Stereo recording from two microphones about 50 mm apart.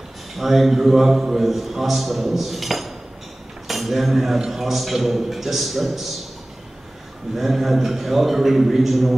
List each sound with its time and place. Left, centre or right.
0.4 s a man's voice: centre
7.3 s a man's voice: centre